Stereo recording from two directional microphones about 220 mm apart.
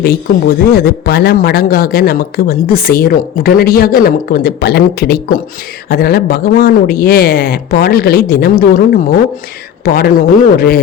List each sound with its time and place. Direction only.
0.0 s speech: 45° left (ahead or behind)